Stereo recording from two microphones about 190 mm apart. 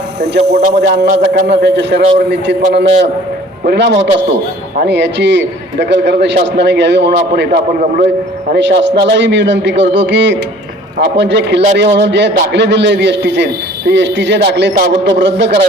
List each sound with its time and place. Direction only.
0.4 s a man's voice: 65° right (ahead or behind)
3.7 s a man's voice: 65° right (ahead or behind)